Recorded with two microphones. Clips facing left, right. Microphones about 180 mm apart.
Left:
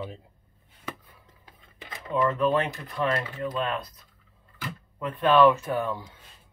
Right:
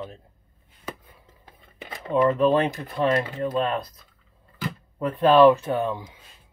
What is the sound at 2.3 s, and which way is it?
Speech, 30° right (ahead or behind).